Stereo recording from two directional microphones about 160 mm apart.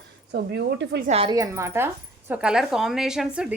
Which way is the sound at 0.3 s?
80° right.